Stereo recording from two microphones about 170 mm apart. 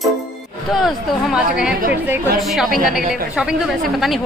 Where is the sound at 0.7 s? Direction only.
5° right (ahead or behind).